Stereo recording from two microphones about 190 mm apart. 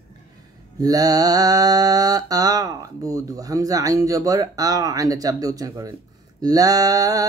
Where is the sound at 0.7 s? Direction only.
20° right (ahead or behind).